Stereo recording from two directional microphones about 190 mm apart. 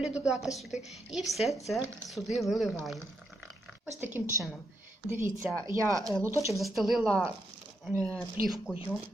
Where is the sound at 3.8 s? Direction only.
10° right (ahead or behind).